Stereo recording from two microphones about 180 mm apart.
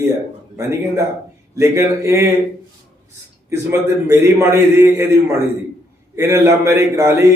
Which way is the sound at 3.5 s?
15° right (ahead or behind).